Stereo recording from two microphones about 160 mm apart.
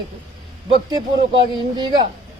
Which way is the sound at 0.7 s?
30° right (ahead or behind).